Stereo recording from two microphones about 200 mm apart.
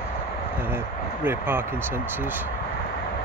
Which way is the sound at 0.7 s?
10° right (ahead or behind).